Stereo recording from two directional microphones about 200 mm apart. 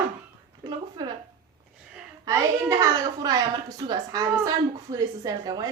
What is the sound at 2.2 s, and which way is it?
A woman's voice, 15° right (ahead or behind).